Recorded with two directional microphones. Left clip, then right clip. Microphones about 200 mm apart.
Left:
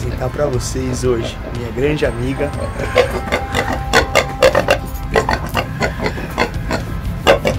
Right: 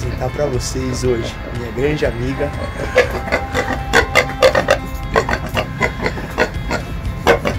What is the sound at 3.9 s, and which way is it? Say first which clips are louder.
Music: even; 15° left (ahead or behind).